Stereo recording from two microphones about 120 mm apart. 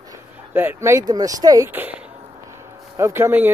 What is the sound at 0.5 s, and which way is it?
Speech, 20° right (ahead or behind).